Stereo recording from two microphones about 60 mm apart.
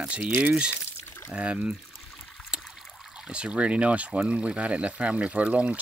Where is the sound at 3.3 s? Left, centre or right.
Centre.